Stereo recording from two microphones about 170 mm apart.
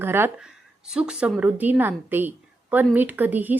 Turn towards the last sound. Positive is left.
turn(degrees=-10)  # may be behind; listen again after turning